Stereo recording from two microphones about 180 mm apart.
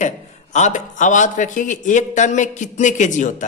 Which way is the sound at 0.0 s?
40° left (ahead or behind).